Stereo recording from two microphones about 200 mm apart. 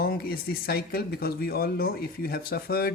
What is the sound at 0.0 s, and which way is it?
Speech, 50° left (ahead or behind).